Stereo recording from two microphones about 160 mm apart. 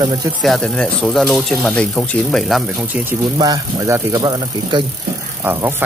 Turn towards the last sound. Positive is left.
turn(degrees=-15)  # may be behind; listen again after turning